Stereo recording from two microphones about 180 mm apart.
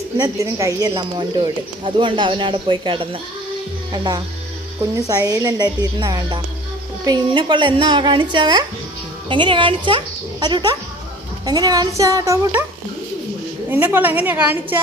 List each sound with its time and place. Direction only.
0.2 s speech: 20° right (ahead or behind)
13.7 s a woman's voice: 10° right (ahead or behind)